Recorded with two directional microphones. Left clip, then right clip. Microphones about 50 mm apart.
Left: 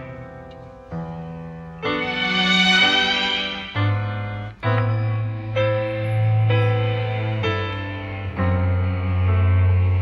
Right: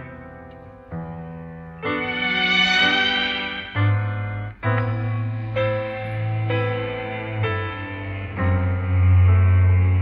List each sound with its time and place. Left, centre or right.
1.8 s music: left
4.7 s music: centre
6.9 s music: left